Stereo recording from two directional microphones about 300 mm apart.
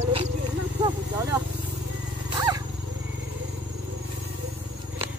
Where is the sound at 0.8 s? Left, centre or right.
Centre.